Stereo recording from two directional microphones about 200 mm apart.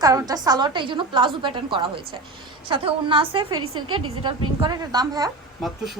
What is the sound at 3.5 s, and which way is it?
Speech, 90° right.